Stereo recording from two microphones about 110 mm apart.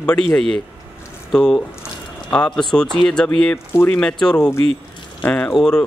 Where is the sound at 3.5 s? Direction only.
20° left (ahead or behind).